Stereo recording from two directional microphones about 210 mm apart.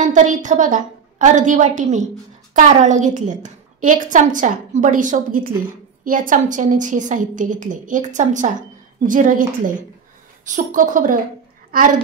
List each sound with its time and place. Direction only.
0.0 s a woman's voice: 35° right (ahead or behind)